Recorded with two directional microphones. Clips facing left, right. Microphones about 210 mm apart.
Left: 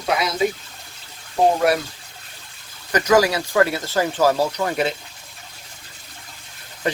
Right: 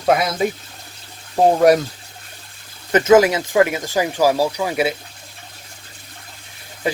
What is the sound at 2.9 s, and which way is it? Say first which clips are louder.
Speech: right 5 dB; 25° right (ahead or behind).